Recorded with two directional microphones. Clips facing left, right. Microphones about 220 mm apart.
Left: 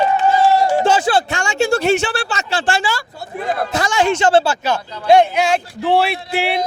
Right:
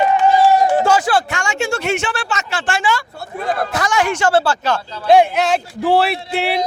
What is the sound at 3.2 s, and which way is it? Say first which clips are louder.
Speech: even; 20° left (ahead or behind).